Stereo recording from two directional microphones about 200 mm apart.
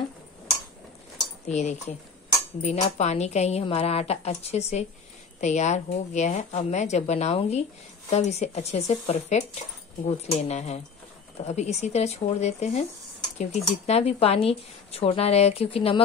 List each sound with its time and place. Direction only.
1.5 s speech: 35° left (ahead or behind)